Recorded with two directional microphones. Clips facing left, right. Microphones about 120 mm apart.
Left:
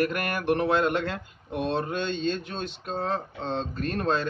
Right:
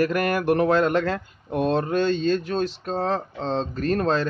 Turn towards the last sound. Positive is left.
turn(degrees=-35)  # may be behind; listen again after turning